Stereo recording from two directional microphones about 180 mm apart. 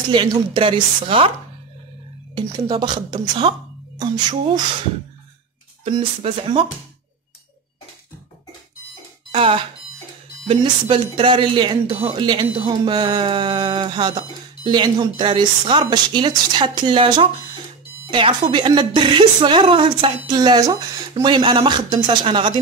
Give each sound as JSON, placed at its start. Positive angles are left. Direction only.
{"t": 0.1, "sound": "speech", "side_deg": -25}
{"t": 2.3, "sound": "speech", "side_deg": -25}
{"t": 5.9, "sound": "speech", "side_deg": -30}
{"t": 9.3, "sound": "speech", "side_deg": -30}